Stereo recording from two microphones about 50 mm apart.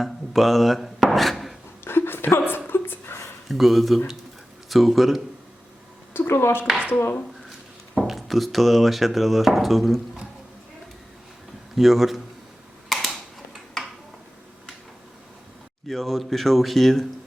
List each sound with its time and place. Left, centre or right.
0.0 s a sound: centre
1.8 s a sound: left
3.5 s speech: centre
6.2 s speech: left
6.7 s speech: right
7.9 s speech: centre
11.7 s speech: centre
12.9 s a sound: centre
15.9 s speech: centre